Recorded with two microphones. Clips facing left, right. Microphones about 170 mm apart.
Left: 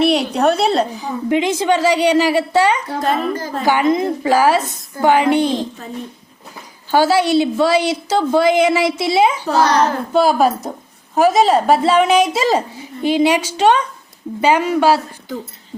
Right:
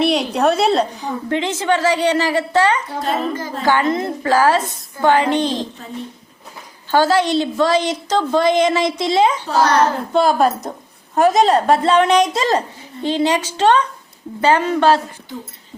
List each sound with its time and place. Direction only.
0.0 s a woman's voice: centre (ahead or behind)
1.3 s a woman's voice: 15° left (ahead or behind)
3.0 s a child's voice: 40° left (ahead or behind)
3.6 s a woman's voice: 15° left (ahead or behind)
6.9 s a woman's voice: 10° left (ahead or behind)